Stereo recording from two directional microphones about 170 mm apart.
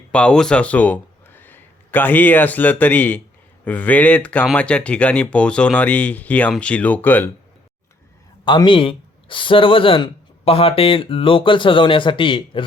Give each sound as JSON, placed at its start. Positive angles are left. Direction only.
{"t": 0.1, "sound": "speech", "side_deg": 5}
{"t": 8.4, "sound": "speech", "side_deg": 30}